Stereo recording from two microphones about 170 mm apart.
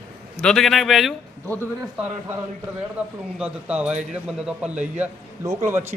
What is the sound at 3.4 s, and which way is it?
A man's voice, 5° right (ahead or behind).